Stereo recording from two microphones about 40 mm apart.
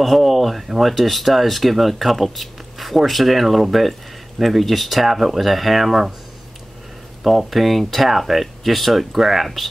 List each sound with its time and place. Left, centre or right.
0.0 s speech: centre
7.2 s speech: centre